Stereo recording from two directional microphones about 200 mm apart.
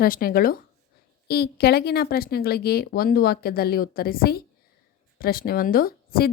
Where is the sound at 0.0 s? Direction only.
45° left (ahead or behind).